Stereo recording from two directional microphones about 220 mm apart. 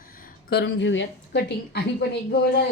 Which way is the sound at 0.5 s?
55° left (ahead or behind).